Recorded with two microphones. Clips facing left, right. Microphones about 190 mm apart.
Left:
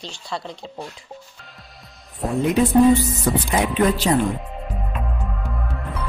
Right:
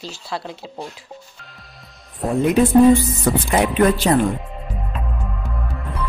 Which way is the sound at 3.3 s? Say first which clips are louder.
Right 2 dB; 60° right (ahead or behind).